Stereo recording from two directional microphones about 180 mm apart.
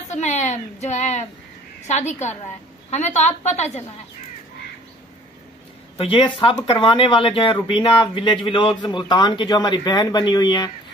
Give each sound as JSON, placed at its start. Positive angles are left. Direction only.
{"t": 0.1, "sound": "a woman's voice", "side_deg": 40}
{"t": 5.9, "sound": "speech", "side_deg": 30}